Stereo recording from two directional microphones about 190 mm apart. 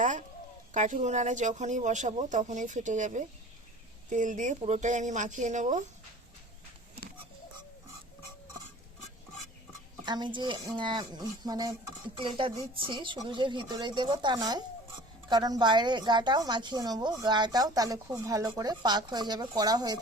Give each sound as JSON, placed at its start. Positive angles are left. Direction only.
{"t": 0.0, "sound": "a sound", "side_deg": -40}
{"t": 0.7, "sound": "speech", "side_deg": -40}
{"t": 10.1, "sound": "a woman's voice", "side_deg": -25}